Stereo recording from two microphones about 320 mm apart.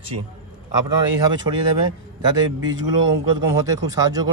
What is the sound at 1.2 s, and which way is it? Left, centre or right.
Speech, centre.